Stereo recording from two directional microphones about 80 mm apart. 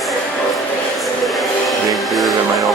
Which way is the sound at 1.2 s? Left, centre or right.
Centre.